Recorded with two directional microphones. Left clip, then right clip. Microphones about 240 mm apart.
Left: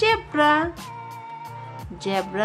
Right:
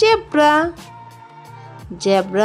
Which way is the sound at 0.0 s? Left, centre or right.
Right.